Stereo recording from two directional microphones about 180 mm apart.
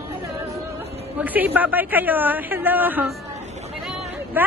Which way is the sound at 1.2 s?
10° right (ahead or behind).